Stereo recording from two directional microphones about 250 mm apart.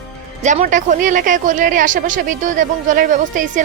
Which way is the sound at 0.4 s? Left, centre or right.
Right.